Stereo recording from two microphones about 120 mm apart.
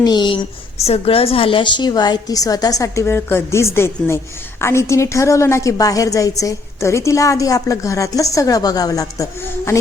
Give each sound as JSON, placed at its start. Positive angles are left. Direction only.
{"t": 0.0, "sound": "a woman's voice", "side_deg": 35}
{"t": 0.9, "sound": "a woman's voice", "side_deg": 50}